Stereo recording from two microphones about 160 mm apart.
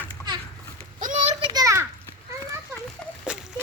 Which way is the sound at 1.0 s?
50° right (ahead or behind).